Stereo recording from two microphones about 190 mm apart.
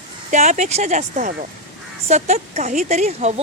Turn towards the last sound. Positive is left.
turn(degrees=-35)  # may be behind; listen again after turning